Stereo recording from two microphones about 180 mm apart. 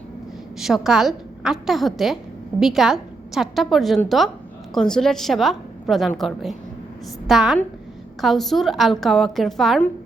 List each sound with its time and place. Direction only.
0.6 s a woman's voice: centre (ahead or behind)